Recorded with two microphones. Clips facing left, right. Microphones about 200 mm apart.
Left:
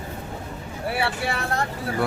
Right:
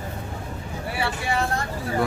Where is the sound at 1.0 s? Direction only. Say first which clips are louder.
Even; 70° left (ahead or behind).